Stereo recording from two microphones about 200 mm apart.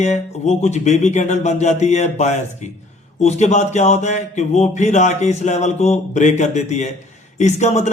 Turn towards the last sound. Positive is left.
turn(degrees=35)  # may be behind; listen again after turning